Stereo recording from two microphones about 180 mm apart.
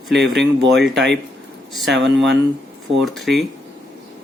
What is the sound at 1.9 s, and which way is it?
Speech, centre (ahead or behind).